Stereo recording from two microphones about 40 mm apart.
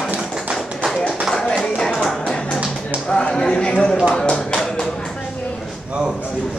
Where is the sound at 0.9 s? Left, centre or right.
Centre.